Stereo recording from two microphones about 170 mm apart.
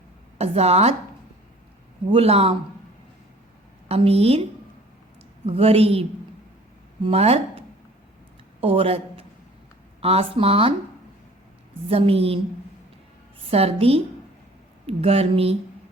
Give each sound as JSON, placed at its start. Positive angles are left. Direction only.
{"t": 0.3, "sound": "a woman's voice", "side_deg": -35}
{"t": 2.1, "sound": "speech", "side_deg": -35}
{"t": 3.8, "sound": "speech", "side_deg": -35}
{"t": 5.5, "sound": "speech", "side_deg": -35}
{"t": 8.6, "sound": "speech", "side_deg": -30}
{"t": 11.9, "sound": "speech", "side_deg": -35}
{"t": 13.5, "sound": "speech", "side_deg": -35}